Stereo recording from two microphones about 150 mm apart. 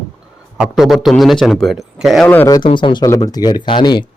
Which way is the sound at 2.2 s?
10° left (ahead or behind).